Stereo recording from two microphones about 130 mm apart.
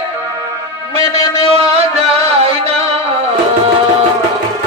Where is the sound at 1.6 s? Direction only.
50° right (ahead or behind).